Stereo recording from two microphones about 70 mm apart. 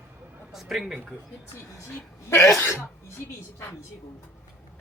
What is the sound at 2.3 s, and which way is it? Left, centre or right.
Speech, left.